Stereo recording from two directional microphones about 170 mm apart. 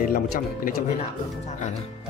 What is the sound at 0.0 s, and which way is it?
Speech, 55° left (ahead or behind).